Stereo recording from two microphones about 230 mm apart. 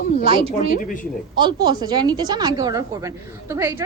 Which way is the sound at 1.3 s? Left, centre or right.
Centre.